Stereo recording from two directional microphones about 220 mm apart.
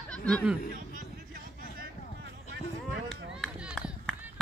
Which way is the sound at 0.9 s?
40° right (ahead or behind).